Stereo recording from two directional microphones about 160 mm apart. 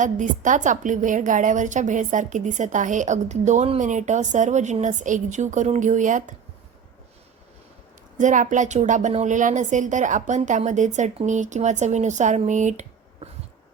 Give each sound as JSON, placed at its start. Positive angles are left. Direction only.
{"t": 0.0, "sound": "a woman's voice", "side_deg": -50}
{"t": 8.2, "sound": "a woman's voice", "side_deg": -50}